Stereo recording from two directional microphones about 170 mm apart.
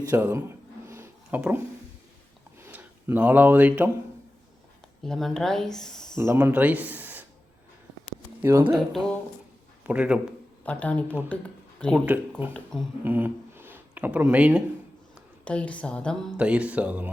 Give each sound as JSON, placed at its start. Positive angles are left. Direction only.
{"t": 0.0, "sound": "a sound", "side_deg": -15}
{"t": 2.6, "sound": "speech", "side_deg": -15}
{"t": 5.0, "sound": "speech", "side_deg": 0}
{"t": 6.1, "sound": "speech", "side_deg": -15}
{"t": 8.4, "sound": "speech", "side_deg": -15}
{"t": 8.7, "sound": "a man's voice", "side_deg": 0}
{"t": 10.7, "sound": "a woman's voice", "side_deg": 10}
{"t": 13.1, "sound": "speech", "side_deg": -10}
{"t": 15.4, "sound": "a woman's voice", "side_deg": 5}
{"t": 16.4, "sound": "speech", "side_deg": -5}